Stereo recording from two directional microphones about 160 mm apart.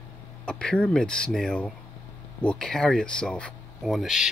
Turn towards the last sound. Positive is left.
turn(degrees=0)  # may be behind; listen again after turning